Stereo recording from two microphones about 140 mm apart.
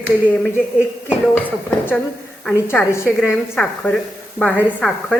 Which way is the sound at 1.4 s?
10° left (ahead or behind).